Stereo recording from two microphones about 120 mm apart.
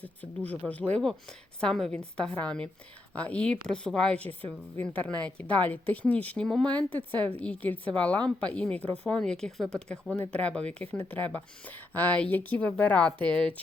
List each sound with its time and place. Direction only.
0.0 s speech: 15° left (ahead or behind)